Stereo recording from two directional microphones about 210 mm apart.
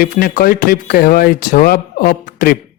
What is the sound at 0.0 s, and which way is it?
Speech, 45° left (ahead or behind).